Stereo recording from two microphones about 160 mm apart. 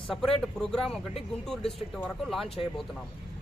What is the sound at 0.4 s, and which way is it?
Speech, 5° left (ahead or behind).